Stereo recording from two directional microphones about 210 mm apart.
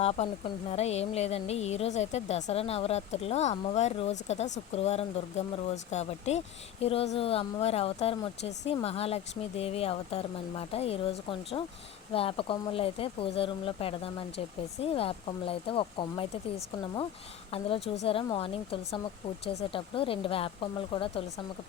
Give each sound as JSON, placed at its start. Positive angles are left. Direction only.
{"t": 0.0, "sound": "speech", "side_deg": 30}